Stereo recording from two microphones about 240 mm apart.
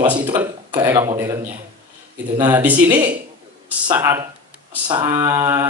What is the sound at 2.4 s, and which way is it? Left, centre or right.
A man's voice, centre.